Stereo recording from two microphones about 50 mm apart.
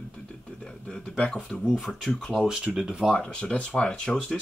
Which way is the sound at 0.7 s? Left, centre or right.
Centre.